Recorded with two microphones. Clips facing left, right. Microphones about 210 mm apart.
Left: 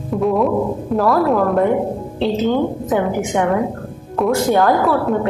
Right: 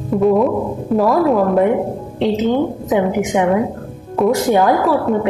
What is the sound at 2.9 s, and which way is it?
A woman's voice, 15° right (ahead or behind).